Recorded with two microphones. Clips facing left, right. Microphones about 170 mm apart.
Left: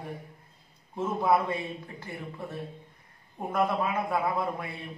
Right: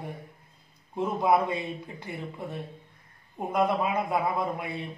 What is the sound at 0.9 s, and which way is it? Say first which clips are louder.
Speech: right 1 dB; 15° right (ahead or behind).